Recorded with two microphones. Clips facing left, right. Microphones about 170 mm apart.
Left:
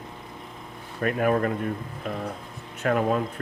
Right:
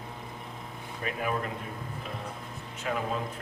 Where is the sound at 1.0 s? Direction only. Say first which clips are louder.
Left 9 dB; 55° left (ahead or behind).